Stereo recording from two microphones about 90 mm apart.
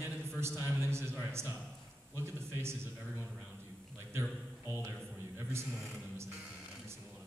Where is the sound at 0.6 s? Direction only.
30° right (ahead or behind).